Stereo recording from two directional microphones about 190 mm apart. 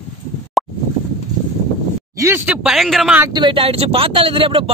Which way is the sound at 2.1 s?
15° right (ahead or behind).